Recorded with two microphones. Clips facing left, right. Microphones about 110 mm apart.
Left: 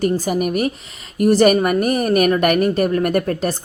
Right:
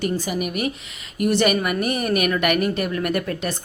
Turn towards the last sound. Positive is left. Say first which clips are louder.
# left 5 dB
turn(degrees=40)  # may be behind; listen again after turning